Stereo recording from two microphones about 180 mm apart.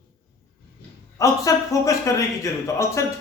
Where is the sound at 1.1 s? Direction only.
20° left (ahead or behind).